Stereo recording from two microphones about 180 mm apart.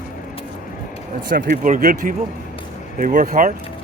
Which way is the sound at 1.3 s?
50° right (ahead or behind).